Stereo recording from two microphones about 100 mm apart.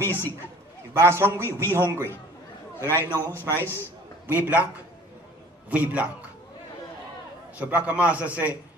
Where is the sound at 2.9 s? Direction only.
20° left (ahead or behind).